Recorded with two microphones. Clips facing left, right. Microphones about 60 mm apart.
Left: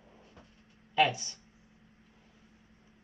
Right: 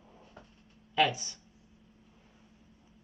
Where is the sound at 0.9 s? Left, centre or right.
Left.